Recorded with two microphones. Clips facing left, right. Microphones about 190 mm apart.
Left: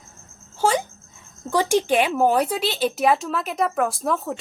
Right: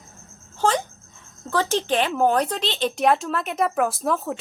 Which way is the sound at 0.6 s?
10° left (ahead or behind).